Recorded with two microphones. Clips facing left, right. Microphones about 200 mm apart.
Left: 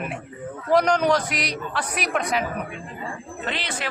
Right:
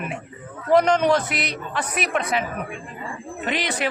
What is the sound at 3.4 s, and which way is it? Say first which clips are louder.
Speech: right 5 dB; 15° right (ahead or behind).